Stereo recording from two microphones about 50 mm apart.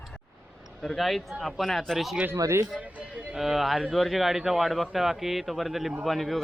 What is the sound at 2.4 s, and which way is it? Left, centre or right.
Speech, right.